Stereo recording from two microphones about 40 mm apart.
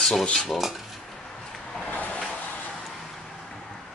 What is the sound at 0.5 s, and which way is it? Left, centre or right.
Dishes, centre.